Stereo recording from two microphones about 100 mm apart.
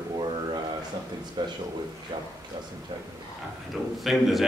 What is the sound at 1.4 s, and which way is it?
Speech, 45° right (ahead or behind).